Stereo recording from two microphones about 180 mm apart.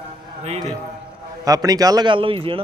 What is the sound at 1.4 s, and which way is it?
A man's voice, 20° right (ahead or behind).